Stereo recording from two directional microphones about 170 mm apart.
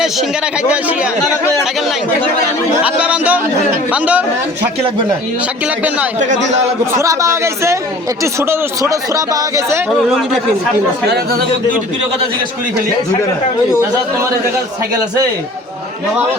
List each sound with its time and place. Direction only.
2.8 s a man's voice: 5° right (ahead or behind)
6.1 s a man's voice: 45° right (ahead or behind)
6.9 s a man's voice: 20° right (ahead or behind)
10.1 s a man's voice: centre (ahead or behind)
11.0 s speech: 70° right (ahead or behind)